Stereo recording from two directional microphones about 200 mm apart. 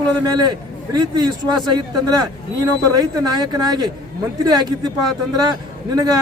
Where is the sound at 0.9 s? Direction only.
20° right (ahead or behind).